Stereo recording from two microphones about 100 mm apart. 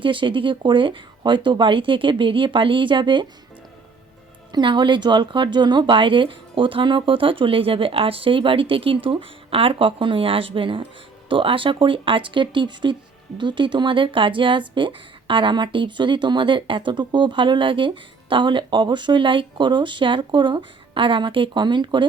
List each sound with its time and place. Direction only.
0.0 s speech: 55° right (ahead or behind)
4.5 s speech: 50° right (ahead or behind)